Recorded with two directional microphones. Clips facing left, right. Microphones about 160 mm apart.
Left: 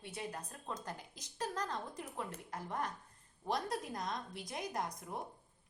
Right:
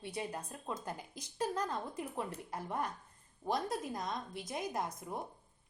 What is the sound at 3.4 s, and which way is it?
A woman's voice, centre (ahead or behind).